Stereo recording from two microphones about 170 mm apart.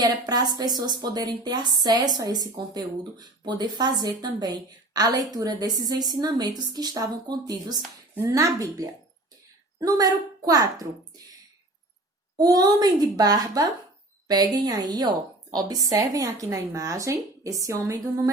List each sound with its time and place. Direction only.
0.0 s speech: 25° right (ahead or behind)
9.8 s speech: 20° right (ahead or behind)
12.4 s speech: 25° right (ahead or behind)